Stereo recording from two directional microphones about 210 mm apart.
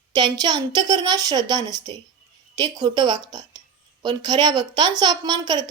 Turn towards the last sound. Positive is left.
turn(degrees=-20)  # may be behind; listen again after turning